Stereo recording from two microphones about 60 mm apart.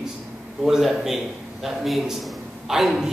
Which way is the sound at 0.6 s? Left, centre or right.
Centre.